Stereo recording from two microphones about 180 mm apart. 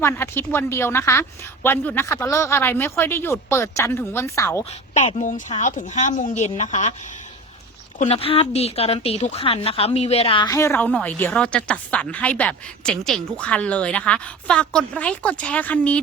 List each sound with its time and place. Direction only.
0.0 s a woman's voice: 15° left (ahead or behind)
4.9 s speech: 45° left (ahead or behind)
7.9 s a woman's voice: 35° left (ahead or behind); by 16.0 s 10° left (ahead or behind)